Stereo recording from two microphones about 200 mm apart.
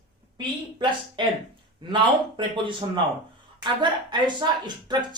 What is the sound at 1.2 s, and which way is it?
Speech, 25° right (ahead or behind).